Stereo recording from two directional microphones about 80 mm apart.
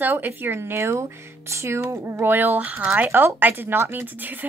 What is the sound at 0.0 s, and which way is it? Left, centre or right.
A woman's voice, right.